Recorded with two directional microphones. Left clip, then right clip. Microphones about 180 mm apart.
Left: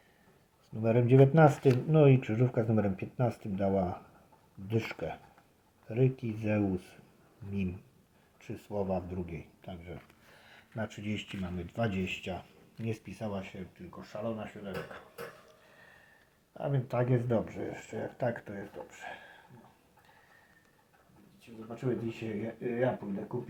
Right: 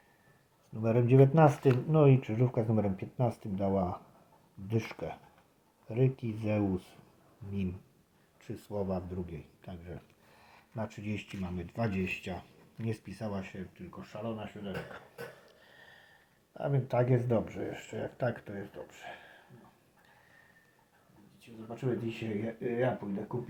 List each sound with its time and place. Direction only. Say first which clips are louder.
0.8 s speech: left 1 dB; 5° left (ahead or behind)
8.4 s speech: left 1 dB; centre (ahead or behind)
16.6 s speech: right 2 dB; 5° right (ahead or behind)
21.8 s speech: even; 5° right (ahead or behind)